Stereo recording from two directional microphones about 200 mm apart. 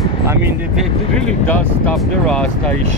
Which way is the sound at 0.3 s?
10° right (ahead or behind).